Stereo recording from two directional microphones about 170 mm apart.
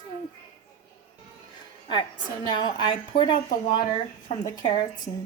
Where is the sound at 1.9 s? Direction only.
25° left (ahead or behind).